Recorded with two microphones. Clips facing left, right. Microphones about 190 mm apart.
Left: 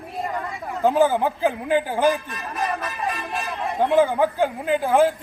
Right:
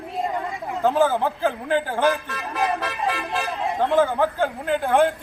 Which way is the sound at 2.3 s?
70° right (ahead or behind).